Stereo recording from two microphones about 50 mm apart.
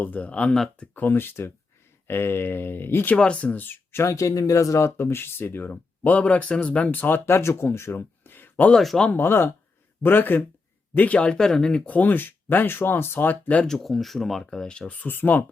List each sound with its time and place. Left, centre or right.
0.2 s speech: left
0.9 s speech: left
3.2 s speech: left
3.6 s speech: left
4.0 s speech: left
7.0 s speech: left
7.9 s a sound: left
8.7 s speech: centre
9.1 s speech: left
11.2 s speech: centre
11.9 s speech: left
13.7 s speech: centre
14.6 s speech: centre
14.9 s speech: left